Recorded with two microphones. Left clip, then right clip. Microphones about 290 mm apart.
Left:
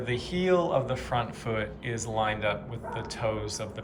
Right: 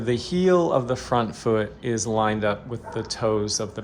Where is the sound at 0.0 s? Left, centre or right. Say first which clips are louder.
Right 7 dB; centre.